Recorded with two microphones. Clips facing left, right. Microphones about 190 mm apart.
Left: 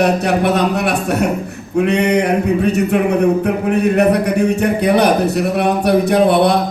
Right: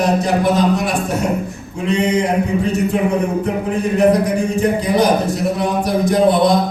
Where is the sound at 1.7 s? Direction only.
65° left (ahead or behind).